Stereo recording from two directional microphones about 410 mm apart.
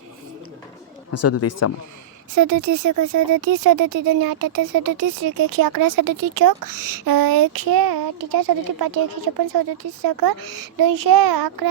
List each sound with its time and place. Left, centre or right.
1.1 s speech: left
2.3 s speech: right